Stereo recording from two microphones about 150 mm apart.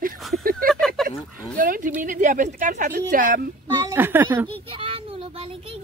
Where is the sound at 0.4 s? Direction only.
70° right (ahead or behind).